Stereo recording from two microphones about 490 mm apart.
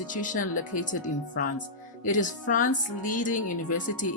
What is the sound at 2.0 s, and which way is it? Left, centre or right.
A woman's voice, centre.